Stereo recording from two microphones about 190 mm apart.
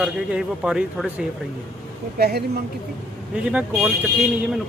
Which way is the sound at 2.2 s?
55° right (ahead or behind).